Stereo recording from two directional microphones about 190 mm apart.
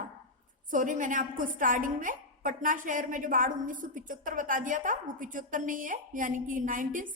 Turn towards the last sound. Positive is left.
turn(degrees=-45)  # may be behind; listen again after turning